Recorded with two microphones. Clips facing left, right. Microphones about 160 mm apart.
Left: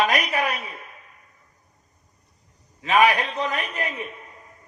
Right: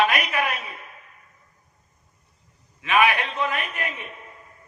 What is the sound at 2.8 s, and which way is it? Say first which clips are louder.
A man's voice: left 2 dB; 40° left (ahead or behind).